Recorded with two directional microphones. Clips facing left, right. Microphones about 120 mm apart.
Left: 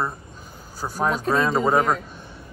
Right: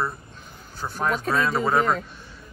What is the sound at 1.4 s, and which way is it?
Speech, 20° left (ahead or behind).